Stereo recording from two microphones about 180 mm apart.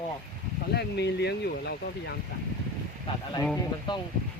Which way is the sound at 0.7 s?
65° left (ahead or behind).